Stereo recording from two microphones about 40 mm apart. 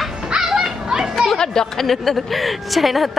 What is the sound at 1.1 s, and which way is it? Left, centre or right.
Speech, centre.